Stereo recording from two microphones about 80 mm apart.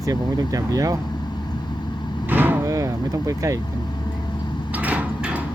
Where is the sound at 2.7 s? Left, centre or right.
Right.